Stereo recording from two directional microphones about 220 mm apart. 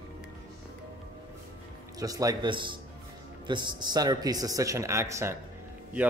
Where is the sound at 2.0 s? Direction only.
15° right (ahead or behind).